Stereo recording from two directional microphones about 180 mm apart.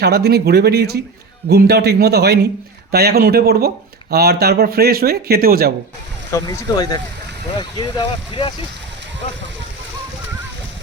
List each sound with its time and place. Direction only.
0.0 s speech: 60° right (ahead or behind)
6.3 s speech: 20° left (ahead or behind)